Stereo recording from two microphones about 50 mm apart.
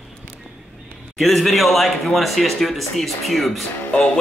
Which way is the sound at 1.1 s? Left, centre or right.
Centre.